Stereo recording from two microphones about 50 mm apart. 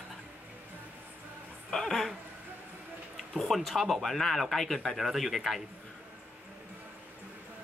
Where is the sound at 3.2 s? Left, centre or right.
Centre.